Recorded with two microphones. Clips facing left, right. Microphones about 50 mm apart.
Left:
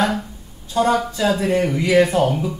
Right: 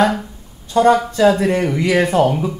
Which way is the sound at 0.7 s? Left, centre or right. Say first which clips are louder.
Right 5 dB; right.